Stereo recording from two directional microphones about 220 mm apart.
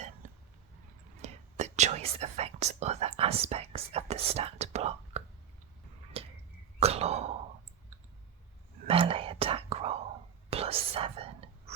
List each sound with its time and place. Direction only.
1.2 s whispering: 30° right (ahead or behind)
6.2 s a sound: 25° right (ahead or behind)
8.9 s whispering: 25° right (ahead or behind)